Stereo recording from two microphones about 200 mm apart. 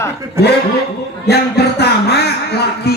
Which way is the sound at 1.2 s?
55° left (ahead or behind).